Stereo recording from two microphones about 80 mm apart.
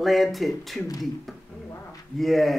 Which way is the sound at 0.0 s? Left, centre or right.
Centre.